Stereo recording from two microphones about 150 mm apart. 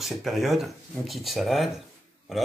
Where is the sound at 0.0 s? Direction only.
Centre (ahead or behind).